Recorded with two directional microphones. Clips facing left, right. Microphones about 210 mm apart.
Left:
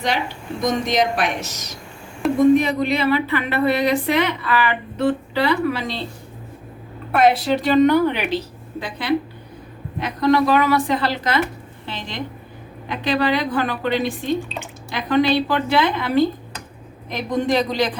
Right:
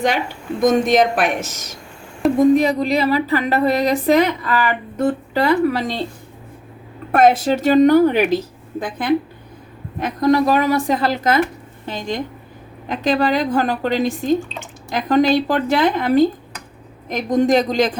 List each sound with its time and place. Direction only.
0.6 s a woman's voice: 50° right (ahead or behind)
2.2 s a sound: centre (ahead or behind)
2.6 s speech: 40° right (ahead or behind)
7.1 s a woman's voice: 45° right (ahead or behind)